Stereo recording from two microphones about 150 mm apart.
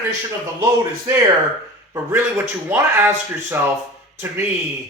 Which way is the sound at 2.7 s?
15° right (ahead or behind).